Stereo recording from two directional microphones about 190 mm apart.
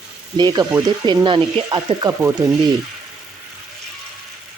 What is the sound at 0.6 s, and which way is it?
Speech, 10° right (ahead or behind).